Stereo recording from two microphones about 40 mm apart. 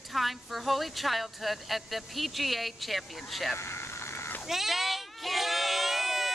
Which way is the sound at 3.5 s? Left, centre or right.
Left.